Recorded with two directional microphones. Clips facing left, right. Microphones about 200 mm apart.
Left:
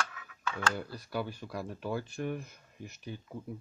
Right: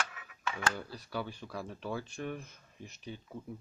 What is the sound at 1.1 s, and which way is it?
Speech, 10° left (ahead or behind).